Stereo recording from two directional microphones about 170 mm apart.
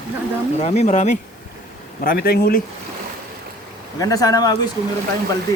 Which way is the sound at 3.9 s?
20° left (ahead or behind).